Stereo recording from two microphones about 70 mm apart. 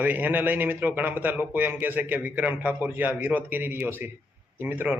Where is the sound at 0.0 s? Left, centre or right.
Right.